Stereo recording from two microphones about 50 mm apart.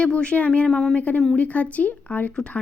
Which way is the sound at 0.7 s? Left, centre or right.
Centre.